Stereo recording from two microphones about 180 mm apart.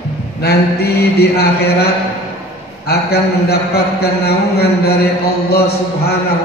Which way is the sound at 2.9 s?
60° left (ahead or behind).